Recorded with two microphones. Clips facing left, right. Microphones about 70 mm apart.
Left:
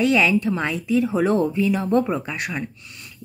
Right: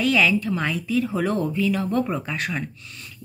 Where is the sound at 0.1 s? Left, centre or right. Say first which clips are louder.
Left 2 dB; centre.